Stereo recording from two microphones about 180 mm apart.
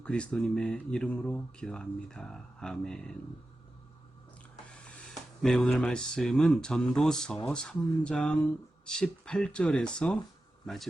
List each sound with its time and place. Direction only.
0.0 s speech: 5° left (ahead or behind)
4.7 s speech: 5° left (ahead or behind)